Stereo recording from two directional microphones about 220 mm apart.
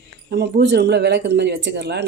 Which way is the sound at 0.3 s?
50° right (ahead or behind).